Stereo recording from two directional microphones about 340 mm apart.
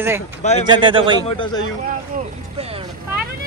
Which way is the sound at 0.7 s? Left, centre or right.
Centre.